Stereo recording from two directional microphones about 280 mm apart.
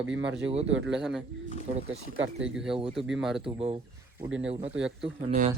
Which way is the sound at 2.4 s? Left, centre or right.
Centre.